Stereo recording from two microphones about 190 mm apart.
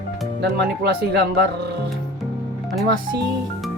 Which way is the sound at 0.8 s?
55° right (ahead or behind).